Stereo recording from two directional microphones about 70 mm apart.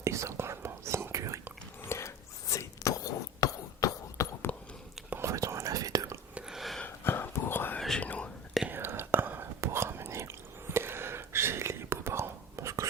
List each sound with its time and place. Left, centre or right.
0.0 s whispering: right
1.9 s whispering: left
4.5 s a sound: left
5.2 s whispering: right
6.5 s a sound: centre
6.8 s whispering: left
7.8 s whispering: centre
8.0 s whispering: left
8.7 s whispering: right